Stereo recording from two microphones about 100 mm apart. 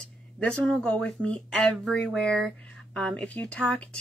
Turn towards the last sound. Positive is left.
turn(degrees=10)  # may be behind; listen again after turning